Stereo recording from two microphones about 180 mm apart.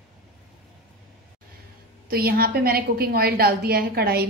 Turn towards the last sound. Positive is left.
turn(degrees=-60)  # may be behind; listen again after turning